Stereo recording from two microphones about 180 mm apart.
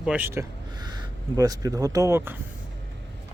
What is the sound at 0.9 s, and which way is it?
Speech, 20° right (ahead or behind).